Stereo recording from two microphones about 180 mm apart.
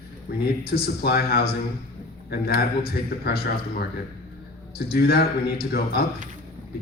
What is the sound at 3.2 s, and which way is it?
A man's voice, 60° left (ahead or behind).